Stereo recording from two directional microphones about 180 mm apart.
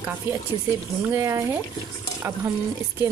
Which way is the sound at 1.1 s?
15° right (ahead or behind).